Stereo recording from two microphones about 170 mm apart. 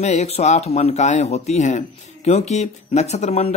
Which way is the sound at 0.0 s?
40° left (ahead or behind).